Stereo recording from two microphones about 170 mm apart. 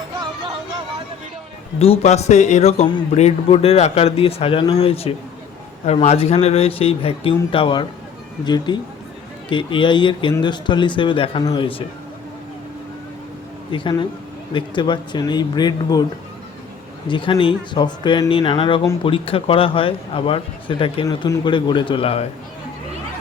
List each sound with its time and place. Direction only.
1.8 s speech: 40° left (ahead or behind)
13.7 s speech: 30° left (ahead or behind)
17.1 s speech: 30° left (ahead or behind)